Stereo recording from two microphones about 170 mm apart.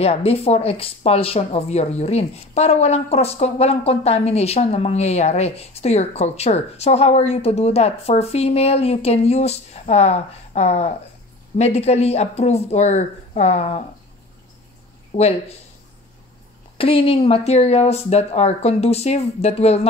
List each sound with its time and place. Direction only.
0.0 s speech: 35° left (ahead or behind)
15.1 s speech: 35° left (ahead or behind)
16.7 s speech: 35° left (ahead or behind)